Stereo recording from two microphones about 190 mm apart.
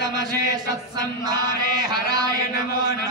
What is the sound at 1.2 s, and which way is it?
Mantra, 20° right (ahead or behind).